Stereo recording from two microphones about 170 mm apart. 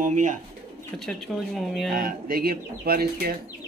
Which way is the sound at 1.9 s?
55° right (ahead or behind).